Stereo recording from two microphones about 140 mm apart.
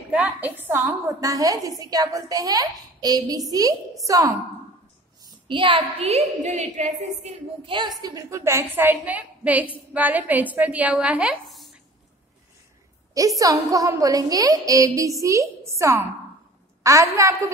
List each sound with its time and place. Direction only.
0.1 s a woman's voice: 10° right (ahead or behind)
5.2 s a woman's voice: 35° right (ahead or behind)
8.0 s a woman's voice: 25° right (ahead or behind); by 11.7 s centre (ahead or behind)
13.4 s a woman's voice: 25° right (ahead or behind)